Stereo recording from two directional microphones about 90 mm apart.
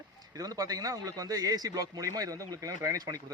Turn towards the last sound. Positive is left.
turn(degrees=-40)  # may be behind; listen again after turning